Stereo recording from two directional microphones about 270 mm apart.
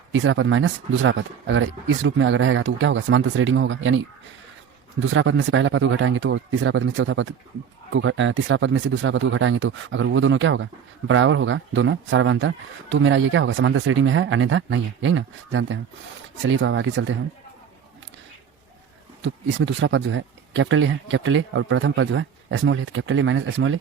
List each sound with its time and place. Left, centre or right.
0.1 s speech: right
19.2 s speech: right